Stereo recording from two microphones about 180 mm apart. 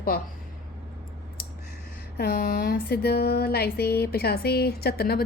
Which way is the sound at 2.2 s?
55° left (ahead or behind).